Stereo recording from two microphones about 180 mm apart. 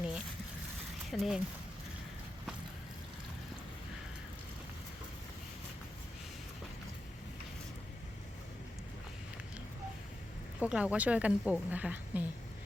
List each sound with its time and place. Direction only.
1.1 s speech: centre (ahead or behind)
10.6 s a woman's voice: 5° right (ahead or behind)